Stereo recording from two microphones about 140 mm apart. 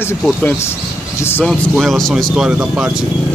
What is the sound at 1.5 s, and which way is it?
Speech, 5° left (ahead or behind).